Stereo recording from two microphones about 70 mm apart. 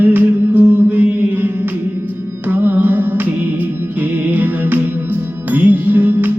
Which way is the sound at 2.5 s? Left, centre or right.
Right.